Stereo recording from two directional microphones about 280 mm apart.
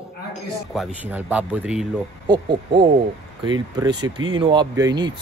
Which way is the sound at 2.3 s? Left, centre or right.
Centre.